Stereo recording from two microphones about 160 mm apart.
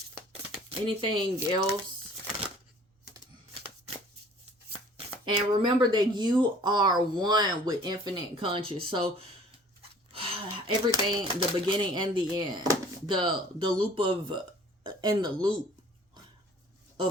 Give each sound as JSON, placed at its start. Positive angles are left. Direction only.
{"t": 0.7, "sound": "speech", "side_deg": -35}
{"t": 4.9, "sound": "speech", "side_deg": -35}
{"t": 10.1, "sound": "a sound", "side_deg": -35}
{"t": 10.9, "sound": "speech", "side_deg": -30}